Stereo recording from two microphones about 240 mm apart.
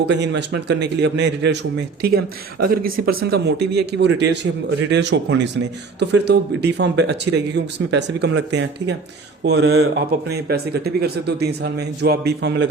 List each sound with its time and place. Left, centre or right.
0.0 s speech: right